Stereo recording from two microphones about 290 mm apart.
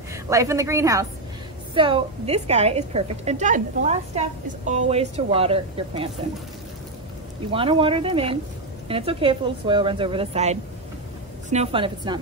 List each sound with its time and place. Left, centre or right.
0.1 s a woman's voice: centre
7.5 s a woman's voice: centre